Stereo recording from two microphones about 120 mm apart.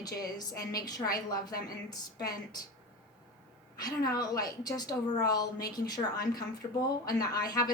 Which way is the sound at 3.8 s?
35° left (ahead or behind).